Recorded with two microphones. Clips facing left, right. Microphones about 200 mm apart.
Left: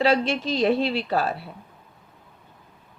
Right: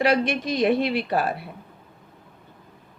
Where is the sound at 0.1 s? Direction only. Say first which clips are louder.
Even; 15° right (ahead or behind).